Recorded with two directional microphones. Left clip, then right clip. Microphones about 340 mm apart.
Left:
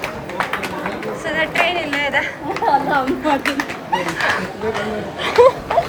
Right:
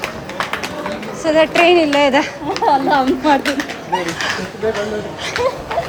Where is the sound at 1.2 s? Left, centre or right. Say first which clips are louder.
Right 6 dB; centre.